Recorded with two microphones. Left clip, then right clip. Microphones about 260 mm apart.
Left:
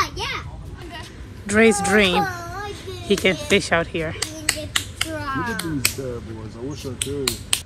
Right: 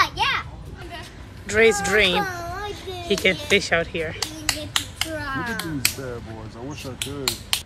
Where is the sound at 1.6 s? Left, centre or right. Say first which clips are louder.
Left 1 dB; centre.